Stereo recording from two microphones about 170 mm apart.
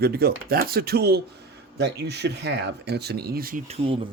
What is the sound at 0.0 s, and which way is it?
Speech, 65° right (ahead or behind).